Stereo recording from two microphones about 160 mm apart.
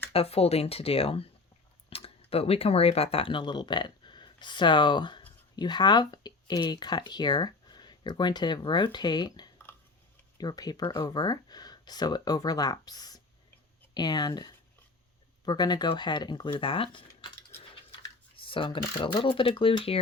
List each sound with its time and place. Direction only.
0.1 s speech: 40° left (ahead or behind)
18.3 s mechanisms: 35° left (ahead or behind)
18.9 s speech: 30° left (ahead or behind)